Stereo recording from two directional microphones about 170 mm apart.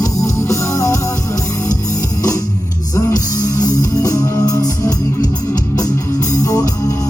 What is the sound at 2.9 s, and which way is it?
Music, 20° left (ahead or behind).